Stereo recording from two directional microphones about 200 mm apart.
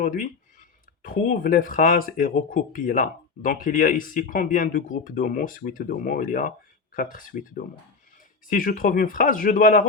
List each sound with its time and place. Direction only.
0.0 s speech: 40° left (ahead or behind)